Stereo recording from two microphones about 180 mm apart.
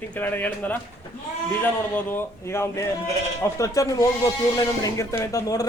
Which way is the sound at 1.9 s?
10° left (ahead or behind).